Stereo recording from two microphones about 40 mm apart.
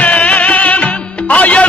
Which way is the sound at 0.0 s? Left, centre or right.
Left.